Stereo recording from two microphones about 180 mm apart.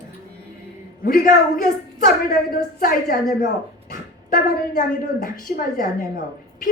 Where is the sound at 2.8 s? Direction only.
55° left (ahead or behind).